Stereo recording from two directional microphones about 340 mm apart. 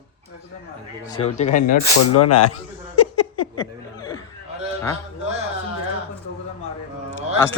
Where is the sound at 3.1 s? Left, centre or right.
Left.